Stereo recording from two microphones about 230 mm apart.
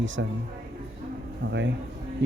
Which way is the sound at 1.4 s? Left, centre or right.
Right.